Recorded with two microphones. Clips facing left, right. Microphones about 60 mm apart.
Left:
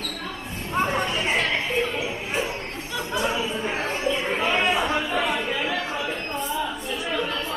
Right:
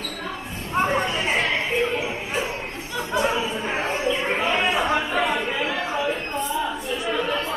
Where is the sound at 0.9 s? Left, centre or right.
Centre.